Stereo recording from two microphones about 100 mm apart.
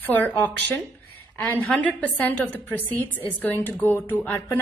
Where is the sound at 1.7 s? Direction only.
15° left (ahead or behind).